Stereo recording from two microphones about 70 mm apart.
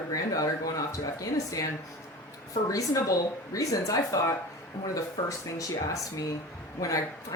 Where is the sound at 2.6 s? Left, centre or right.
Left.